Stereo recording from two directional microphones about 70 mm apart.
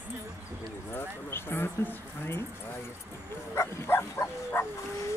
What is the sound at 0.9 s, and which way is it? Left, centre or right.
Speech, left.